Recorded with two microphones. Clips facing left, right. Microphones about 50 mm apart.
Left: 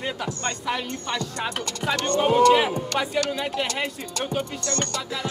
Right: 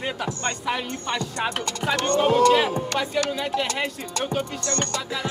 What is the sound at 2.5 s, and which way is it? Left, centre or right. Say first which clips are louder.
Speech: even; centre.